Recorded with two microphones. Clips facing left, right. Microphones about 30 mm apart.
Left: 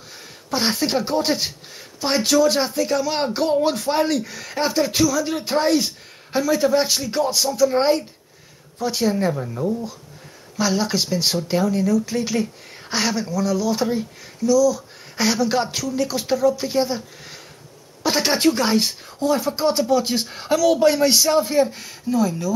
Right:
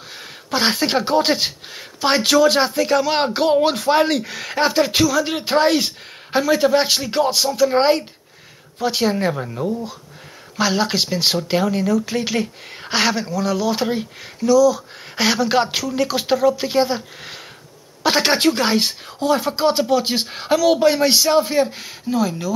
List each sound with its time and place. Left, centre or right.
0.1 s speech: right
10.6 s speech: right